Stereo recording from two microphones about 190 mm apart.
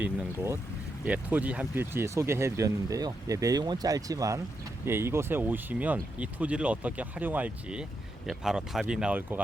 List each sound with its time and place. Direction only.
0.0 s speech: 10° right (ahead or behind)